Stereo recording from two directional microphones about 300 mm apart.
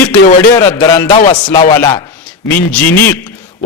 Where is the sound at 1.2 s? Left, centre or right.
Left.